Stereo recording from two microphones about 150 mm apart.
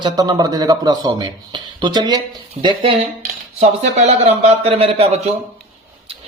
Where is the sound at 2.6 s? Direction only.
50° right (ahead or behind).